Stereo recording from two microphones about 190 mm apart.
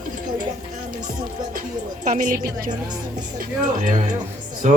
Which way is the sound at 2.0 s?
45° right (ahead or behind).